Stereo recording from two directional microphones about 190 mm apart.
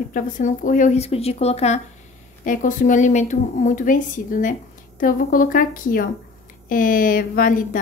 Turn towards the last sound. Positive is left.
turn(degrees=45)  # may be behind; listen again after turning